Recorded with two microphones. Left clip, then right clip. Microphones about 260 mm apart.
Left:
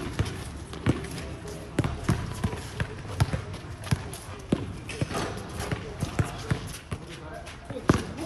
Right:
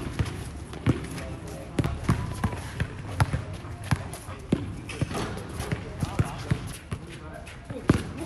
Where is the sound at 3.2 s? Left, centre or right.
Centre.